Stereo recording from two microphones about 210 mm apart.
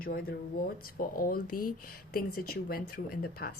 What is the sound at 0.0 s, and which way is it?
Speech, 45° left (ahead or behind).